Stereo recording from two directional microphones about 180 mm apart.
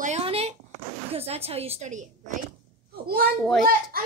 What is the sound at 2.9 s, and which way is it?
Speech, 55° right (ahead or behind).